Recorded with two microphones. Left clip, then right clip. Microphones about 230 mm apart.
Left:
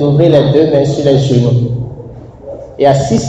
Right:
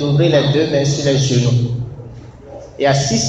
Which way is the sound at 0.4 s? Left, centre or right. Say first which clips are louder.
Left 6 dB; centre.